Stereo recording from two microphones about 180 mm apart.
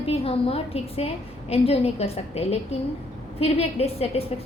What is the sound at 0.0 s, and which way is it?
A woman's voice, 30° left (ahead or behind).